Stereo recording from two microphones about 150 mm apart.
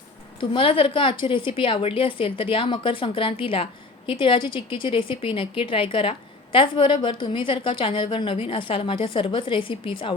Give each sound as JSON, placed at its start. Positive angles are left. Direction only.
{"t": 0.3, "sound": "a woman's voice", "side_deg": 35}